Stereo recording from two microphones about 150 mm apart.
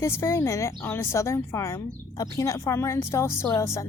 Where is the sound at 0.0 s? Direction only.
15° left (ahead or behind).